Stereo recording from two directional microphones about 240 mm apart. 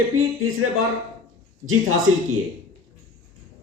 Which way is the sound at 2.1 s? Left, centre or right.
Right.